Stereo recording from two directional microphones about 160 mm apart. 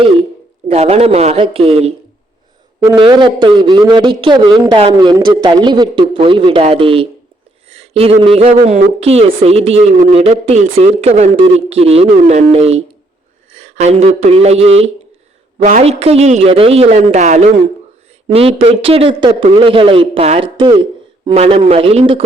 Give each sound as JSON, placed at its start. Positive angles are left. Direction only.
{"t": 0.7, "sound": "a man's voice", "side_deg": -40}
{"t": 2.9, "sound": "a man's voice", "side_deg": -30}